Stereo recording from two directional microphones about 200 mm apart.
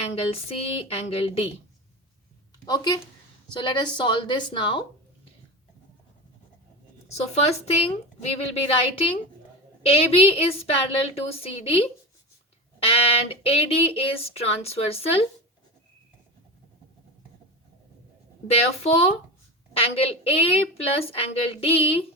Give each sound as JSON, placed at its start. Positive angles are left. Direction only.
{"t": 0.1, "sound": "speech", "side_deg": 30}
{"t": 2.6, "sound": "speech", "side_deg": 20}
{"t": 7.1, "sound": "a woman's voice", "side_deg": 30}
{"t": 18.5, "sound": "a woman's voice", "side_deg": 30}